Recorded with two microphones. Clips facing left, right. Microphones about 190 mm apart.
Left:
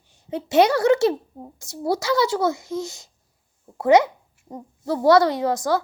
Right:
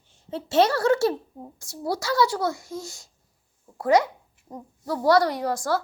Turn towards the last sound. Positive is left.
turn(degrees=20)  # may be behind; listen again after turning